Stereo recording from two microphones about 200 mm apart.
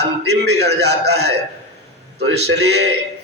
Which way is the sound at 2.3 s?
55° right (ahead or behind).